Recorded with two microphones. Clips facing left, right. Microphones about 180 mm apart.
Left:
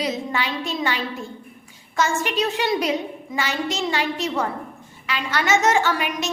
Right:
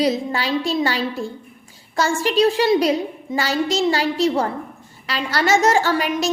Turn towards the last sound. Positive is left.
turn(degrees=-35)  # may be behind; listen again after turning